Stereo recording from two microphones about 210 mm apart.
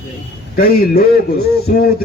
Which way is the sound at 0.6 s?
45° left (ahead or behind).